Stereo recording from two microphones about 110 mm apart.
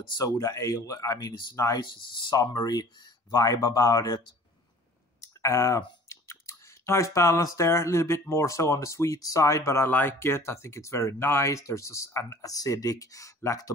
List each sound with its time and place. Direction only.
0.2 s speech: 30° left (ahead or behind)
5.2 s clicking: 30° left (ahead or behind)
6.0 s speech: 25° left (ahead or behind)